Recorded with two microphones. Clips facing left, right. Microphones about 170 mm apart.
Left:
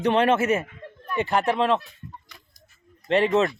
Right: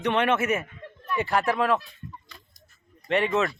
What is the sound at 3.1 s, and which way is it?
Speech, 30° left (ahead or behind).